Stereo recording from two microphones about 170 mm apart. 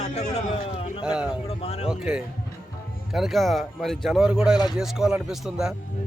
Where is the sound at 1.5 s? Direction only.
40° left (ahead or behind).